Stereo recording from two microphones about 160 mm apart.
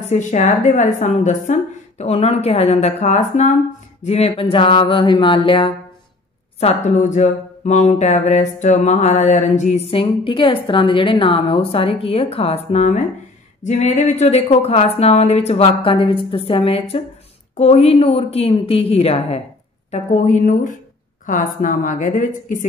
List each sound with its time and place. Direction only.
0.0 s a woman's voice: 45° left (ahead or behind)
6.6 s a woman's voice: 45° left (ahead or behind)